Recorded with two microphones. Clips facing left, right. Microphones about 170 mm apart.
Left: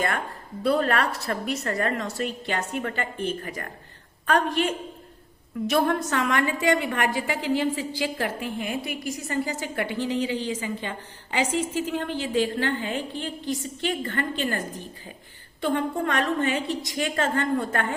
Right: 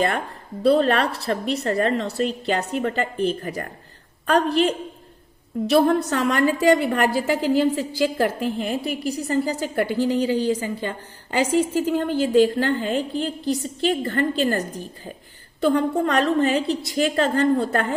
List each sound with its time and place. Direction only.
0.6 s a woman's voice: 30° right (ahead or behind)